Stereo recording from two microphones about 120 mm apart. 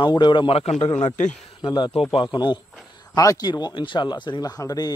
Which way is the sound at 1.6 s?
35° left (ahead or behind).